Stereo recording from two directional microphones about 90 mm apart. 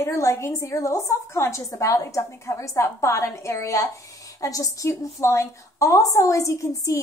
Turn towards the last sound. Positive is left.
turn(degrees=35)  # may be behind; listen again after turning